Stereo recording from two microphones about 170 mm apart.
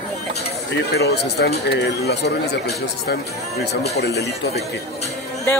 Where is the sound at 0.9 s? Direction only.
80° left.